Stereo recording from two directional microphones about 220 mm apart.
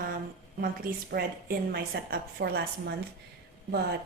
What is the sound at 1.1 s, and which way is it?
A woman's voice, 45° right (ahead or behind).